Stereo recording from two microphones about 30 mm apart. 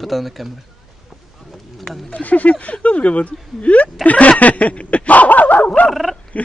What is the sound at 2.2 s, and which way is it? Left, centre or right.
Speech, left.